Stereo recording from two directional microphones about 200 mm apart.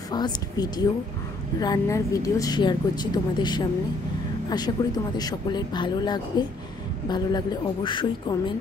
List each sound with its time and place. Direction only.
0.1 s speech: 20° left (ahead or behind)